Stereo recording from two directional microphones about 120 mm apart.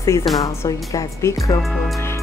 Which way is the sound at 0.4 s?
30° left (ahead or behind).